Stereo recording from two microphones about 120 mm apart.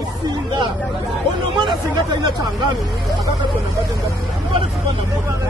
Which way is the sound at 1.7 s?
40° right (ahead or behind).